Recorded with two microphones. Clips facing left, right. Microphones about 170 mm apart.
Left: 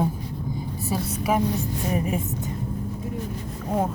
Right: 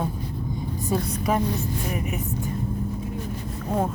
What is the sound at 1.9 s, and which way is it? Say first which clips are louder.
Speech: left 8 dB; 30° left (ahead or behind).